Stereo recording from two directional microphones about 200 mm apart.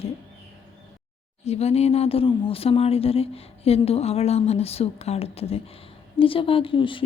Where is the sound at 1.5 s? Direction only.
30° left (ahead or behind).